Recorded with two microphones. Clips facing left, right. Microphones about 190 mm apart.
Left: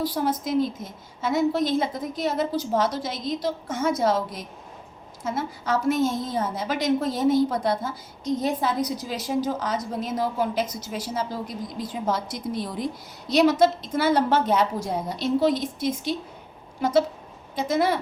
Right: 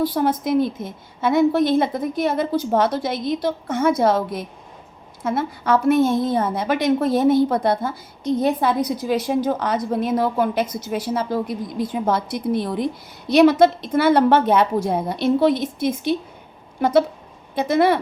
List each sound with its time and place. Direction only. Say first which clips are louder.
0.0 s a woman's voice: right 5 dB; 55° right (ahead or behind)